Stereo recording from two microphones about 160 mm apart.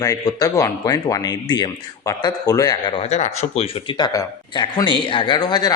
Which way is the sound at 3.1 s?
40° left (ahead or behind).